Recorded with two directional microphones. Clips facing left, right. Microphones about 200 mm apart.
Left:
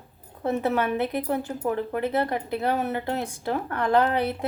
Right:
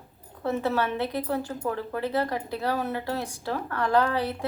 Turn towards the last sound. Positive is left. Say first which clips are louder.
# left 2 dB
turn(degrees=20)  # may be behind; listen again after turning